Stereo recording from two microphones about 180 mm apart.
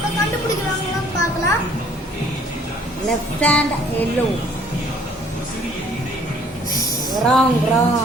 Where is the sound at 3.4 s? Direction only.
5° left (ahead or behind).